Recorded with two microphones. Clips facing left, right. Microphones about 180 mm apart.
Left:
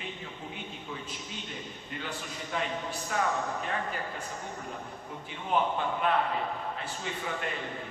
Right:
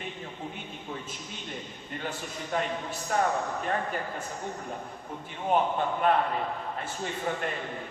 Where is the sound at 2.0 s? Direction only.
45° right (ahead or behind).